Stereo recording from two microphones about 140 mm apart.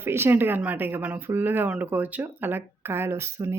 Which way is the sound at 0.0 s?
15° right (ahead or behind).